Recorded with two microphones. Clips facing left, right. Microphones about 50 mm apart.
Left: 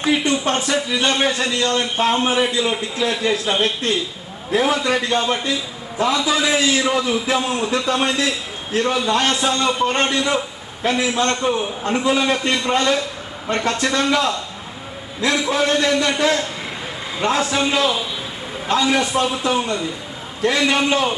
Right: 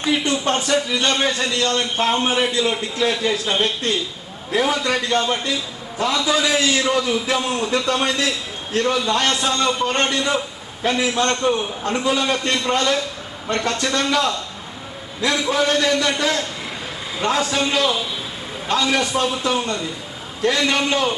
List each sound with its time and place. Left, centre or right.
0.3 s a man's voice: centre
4.5 s a man's voice: centre
12.7 s a man's voice: centre
15.4 s a man's voice: centre
15.7 s a man's voice: centre